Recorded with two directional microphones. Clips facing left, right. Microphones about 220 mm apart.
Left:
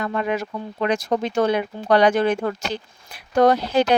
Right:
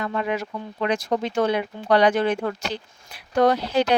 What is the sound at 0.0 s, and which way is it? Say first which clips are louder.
Speech: left 2 dB; 50° left (ahead or behind).